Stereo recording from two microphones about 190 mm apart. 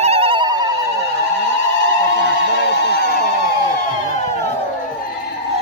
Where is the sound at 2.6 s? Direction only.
65° left (ahead or behind).